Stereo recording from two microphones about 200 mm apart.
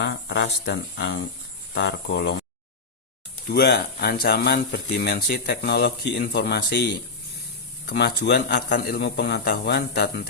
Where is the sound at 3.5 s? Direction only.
55° left (ahead or behind).